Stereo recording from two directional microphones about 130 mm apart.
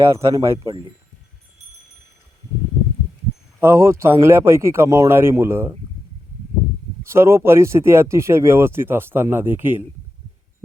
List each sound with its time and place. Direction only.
0.0 s speech: 20° right (ahead or behind)
3.6 s speech: 20° right (ahead or behind)
7.0 s speech: 20° right (ahead or behind)